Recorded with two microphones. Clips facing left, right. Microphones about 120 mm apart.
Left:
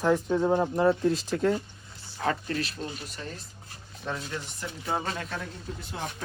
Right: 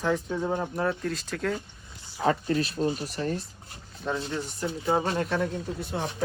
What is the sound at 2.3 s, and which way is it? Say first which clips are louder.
Speech: right 5 dB; 25° right (ahead or behind).